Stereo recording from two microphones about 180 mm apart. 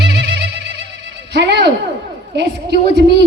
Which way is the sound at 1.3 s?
70° right (ahead or behind).